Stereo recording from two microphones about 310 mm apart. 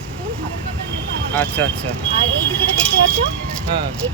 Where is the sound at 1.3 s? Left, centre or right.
Centre.